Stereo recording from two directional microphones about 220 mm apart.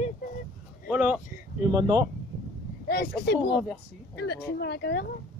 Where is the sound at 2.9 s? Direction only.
45° left (ahead or behind).